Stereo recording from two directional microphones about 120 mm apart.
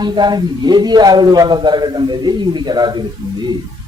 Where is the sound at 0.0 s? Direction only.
35° right (ahead or behind).